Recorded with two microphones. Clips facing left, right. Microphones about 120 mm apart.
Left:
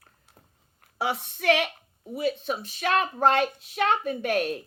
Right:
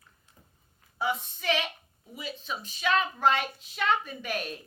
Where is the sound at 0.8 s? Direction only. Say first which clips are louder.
Left 2 dB; 70° left (ahead or behind).